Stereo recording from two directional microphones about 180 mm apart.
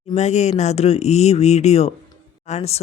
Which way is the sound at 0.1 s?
40° left (ahead or behind).